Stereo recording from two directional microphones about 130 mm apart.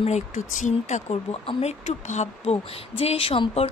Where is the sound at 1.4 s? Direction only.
55° left (ahead or behind).